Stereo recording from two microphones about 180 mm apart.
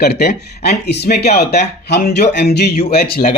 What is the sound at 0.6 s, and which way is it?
A man's voice, 65° left (ahead or behind).